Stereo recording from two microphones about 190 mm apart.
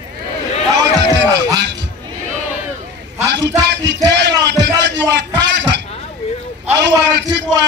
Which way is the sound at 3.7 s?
65° right (ahead or behind).